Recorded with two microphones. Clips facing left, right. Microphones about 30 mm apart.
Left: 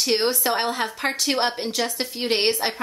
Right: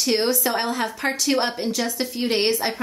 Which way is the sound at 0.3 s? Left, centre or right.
Left.